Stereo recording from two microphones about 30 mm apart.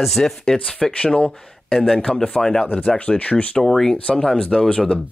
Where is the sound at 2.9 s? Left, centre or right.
Left.